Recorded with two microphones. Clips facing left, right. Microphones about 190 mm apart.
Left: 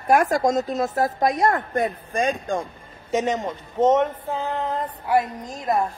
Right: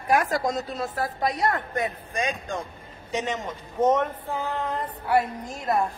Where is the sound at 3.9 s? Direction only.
20° left (ahead or behind).